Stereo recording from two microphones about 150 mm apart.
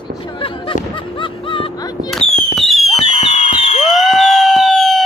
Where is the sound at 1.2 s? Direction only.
35° left (ahead or behind).